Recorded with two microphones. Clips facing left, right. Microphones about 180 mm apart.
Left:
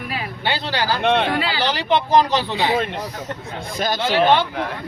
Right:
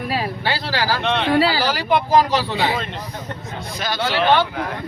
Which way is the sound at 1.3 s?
35° right (ahead or behind).